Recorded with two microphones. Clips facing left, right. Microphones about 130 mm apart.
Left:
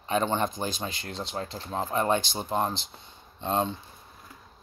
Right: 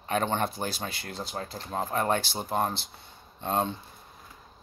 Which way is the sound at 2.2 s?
10° right (ahead or behind).